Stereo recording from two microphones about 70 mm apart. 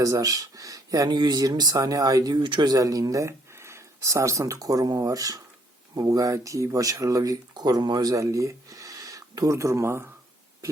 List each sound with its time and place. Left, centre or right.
0.0 s speech: right
8.1 s a sound: right
9.5 s speech: right